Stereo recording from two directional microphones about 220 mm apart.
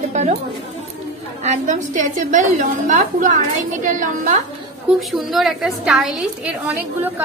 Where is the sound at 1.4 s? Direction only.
35° right (ahead or behind).